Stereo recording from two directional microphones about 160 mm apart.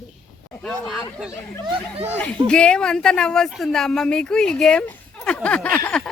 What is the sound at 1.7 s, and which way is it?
Speech, 40° right (ahead or behind).